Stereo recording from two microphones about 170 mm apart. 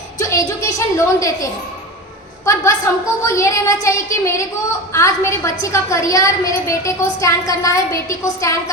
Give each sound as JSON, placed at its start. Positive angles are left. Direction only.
{"t": 0.2, "sound": "a woman's voice", "side_deg": 20}
{"t": 2.5, "sound": "a woman's voice", "side_deg": 20}